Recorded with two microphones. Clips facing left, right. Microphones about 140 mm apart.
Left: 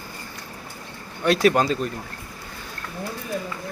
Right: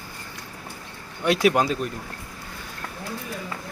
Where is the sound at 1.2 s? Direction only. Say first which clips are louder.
Left 1 dB; 10° right (ahead or behind).